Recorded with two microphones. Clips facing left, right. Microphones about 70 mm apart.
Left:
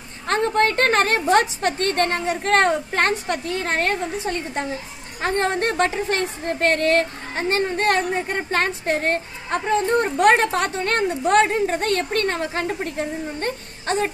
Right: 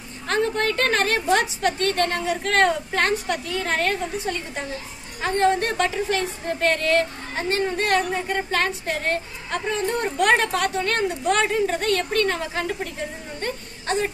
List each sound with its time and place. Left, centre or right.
0.3 s a woman's voice: left